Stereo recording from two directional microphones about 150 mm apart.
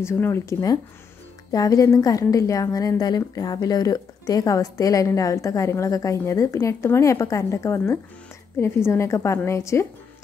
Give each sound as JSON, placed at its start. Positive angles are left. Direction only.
{"t": 0.0, "sound": "a woman's voice", "side_deg": 15}